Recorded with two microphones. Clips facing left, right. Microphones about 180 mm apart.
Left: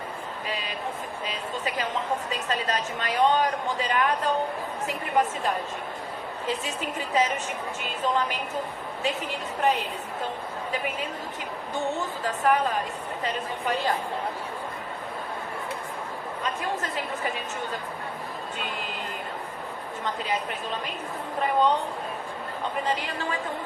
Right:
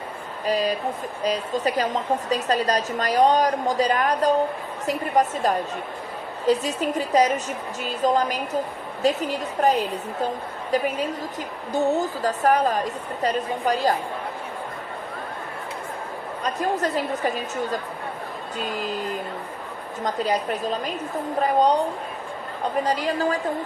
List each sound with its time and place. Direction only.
0.4 s a woman's voice: 40° right (ahead or behind)
11.7 s a woman's voice: 40° right (ahead or behind)
16.4 s a woman's voice: 40° right (ahead or behind)
20.1 s a woman's voice: 40° right (ahead or behind)